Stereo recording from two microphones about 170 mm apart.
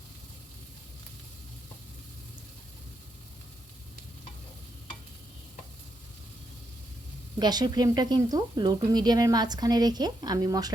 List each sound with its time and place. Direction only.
7.3 s speech: 25° right (ahead or behind)